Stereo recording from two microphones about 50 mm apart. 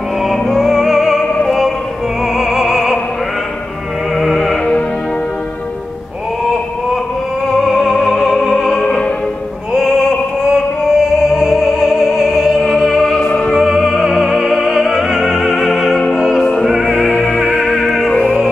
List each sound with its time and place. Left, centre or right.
0.2 s music: centre
2.3 s music: centre
4.2 s music: centre
7.4 s music: centre
9.7 s music: centre
16.2 s opera: centre
16.8 s opera: left
17.5 s music: centre
18.1 s music: left